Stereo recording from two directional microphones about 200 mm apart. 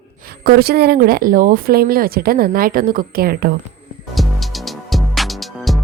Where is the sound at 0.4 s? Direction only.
50° right (ahead or behind).